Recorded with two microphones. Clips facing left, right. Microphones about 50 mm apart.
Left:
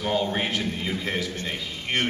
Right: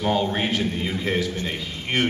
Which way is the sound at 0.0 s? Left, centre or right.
Centre.